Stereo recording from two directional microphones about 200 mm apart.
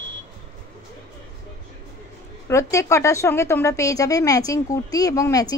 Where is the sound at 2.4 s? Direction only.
15° left (ahead or behind).